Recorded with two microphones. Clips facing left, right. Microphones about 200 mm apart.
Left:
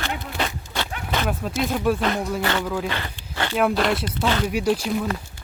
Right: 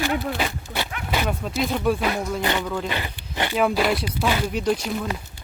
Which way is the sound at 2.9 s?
15° right (ahead or behind).